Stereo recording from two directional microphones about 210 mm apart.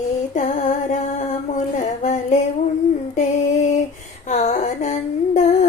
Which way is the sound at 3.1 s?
35° left (ahead or behind).